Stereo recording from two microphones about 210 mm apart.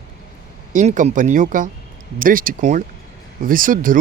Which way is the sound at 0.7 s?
40° right (ahead or behind).